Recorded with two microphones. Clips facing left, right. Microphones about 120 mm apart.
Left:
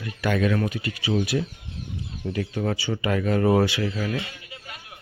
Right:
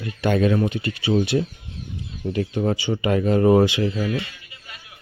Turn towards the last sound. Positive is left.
turn(degrees=-20)  # may be behind; listen again after turning